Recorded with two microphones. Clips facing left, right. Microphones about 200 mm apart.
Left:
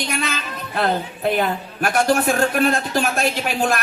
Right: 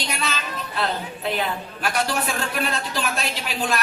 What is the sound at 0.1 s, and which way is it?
A woman's voice, 50° left (ahead or behind).